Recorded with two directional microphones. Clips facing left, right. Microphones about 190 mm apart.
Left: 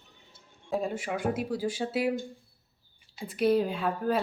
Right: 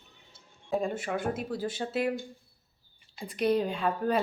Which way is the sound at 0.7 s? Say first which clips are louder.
Right 1 dB; 5° left (ahead or behind).